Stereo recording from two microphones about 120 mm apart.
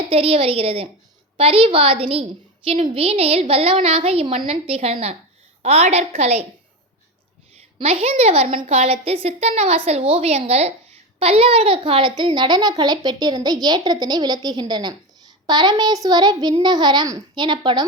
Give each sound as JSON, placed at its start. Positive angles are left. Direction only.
{"t": 0.1, "sound": "a woman's voice", "side_deg": -55}
{"t": 7.8, "sound": "a woman's voice", "side_deg": -55}